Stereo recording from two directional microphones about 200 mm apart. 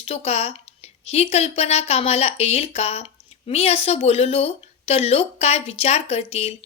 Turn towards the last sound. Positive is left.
turn(degrees=30)  # may be behind; listen again after turning